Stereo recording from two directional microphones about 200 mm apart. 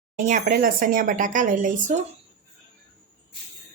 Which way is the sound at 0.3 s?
45° right (ahead or behind).